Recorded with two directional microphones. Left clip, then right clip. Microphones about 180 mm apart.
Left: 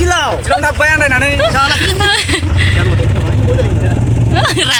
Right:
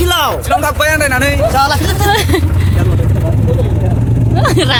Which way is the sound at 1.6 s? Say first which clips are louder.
Left 1 dB; 60° right (ahead or behind).